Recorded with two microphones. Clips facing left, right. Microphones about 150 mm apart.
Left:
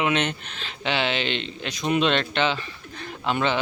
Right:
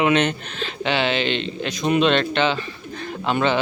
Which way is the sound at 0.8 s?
35° right (ahead or behind).